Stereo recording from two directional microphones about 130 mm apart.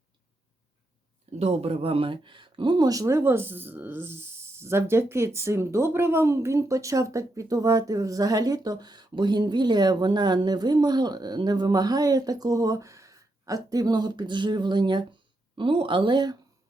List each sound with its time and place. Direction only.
1.4 s speech: 50° right (ahead or behind); by 16.4 s 35° right (ahead or behind)